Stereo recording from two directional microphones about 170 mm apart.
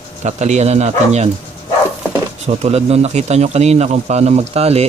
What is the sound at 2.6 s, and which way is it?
A man's voice, 40° right (ahead or behind).